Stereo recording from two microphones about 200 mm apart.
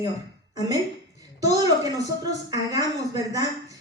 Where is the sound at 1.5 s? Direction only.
20° right (ahead or behind).